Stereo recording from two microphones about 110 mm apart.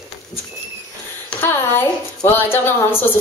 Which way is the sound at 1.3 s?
10° left (ahead or behind).